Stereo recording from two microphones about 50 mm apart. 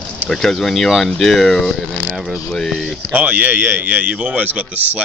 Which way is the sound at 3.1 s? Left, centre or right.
Right.